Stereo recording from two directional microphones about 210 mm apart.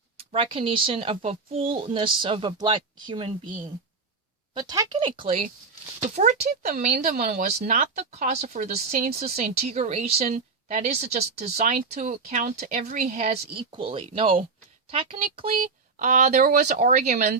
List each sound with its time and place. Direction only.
0.2 s speech: 25° right (ahead or behind)
4.5 s a woman's voice: 20° right (ahead or behind); by 13.3 s 35° right (ahead or behind)
13.6 s a woman's voice: 25° right (ahead or behind)